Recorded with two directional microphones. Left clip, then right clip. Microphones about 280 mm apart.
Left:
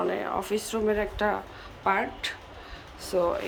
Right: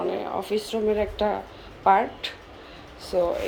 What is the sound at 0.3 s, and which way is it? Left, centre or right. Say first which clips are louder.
A woman's voice: right 2 dB; centre.